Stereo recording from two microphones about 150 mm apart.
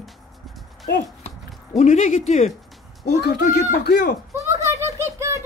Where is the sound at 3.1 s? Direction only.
90° left.